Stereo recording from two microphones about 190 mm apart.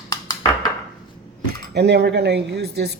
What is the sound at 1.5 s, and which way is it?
A woman's voice, 60° right (ahead or behind).